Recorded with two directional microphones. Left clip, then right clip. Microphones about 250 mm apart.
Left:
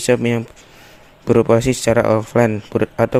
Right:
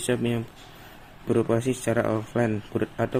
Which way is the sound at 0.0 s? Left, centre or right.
Left.